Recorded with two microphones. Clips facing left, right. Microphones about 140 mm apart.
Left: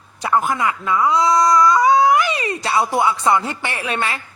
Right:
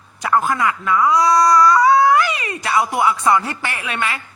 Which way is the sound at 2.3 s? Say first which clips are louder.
Even; 30° left (ahead or behind).